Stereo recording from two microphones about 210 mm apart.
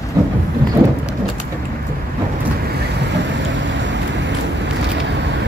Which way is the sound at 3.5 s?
60° right (ahead or behind).